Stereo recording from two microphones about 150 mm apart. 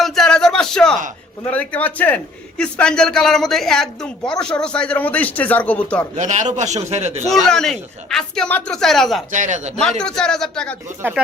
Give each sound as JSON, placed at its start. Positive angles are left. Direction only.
{"t": 0.0, "sound": "a sound", "side_deg": 0}
{"t": 1.5, "sound": "a man's voice", "side_deg": 10}
{"t": 6.1, "sound": "a man's voice", "side_deg": -55}
{"t": 7.3, "sound": "a woman's voice", "side_deg": 5}
{"t": 9.3, "sound": "a man's voice", "side_deg": -55}
{"t": 10.0, "sound": "a woman's voice", "side_deg": 5}
{"t": 11.0, "sound": "speech", "side_deg": -15}